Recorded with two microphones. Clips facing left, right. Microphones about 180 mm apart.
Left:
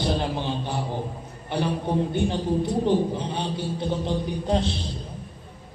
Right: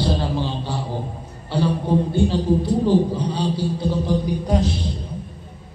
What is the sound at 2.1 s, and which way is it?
Speech, 20° left (ahead or behind).